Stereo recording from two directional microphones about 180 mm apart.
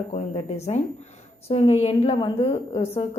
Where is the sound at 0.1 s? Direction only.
35° left (ahead or behind).